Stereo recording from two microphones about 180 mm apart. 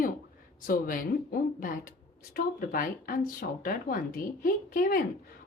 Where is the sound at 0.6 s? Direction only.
50° left (ahead or behind).